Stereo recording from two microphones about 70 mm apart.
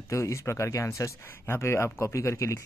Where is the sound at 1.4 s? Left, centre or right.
Left.